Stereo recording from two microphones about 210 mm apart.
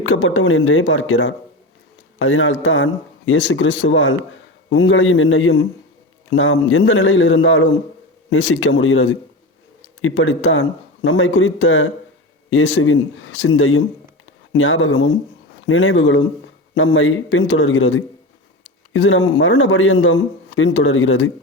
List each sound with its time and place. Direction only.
0.0 s a man's voice: 70° left (ahead or behind)